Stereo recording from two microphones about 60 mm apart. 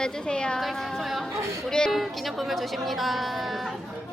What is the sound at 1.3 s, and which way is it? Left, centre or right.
Speech, right.